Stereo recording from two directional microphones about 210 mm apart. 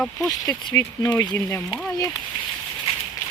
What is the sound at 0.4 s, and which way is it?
Speech, 15° left (ahead or behind).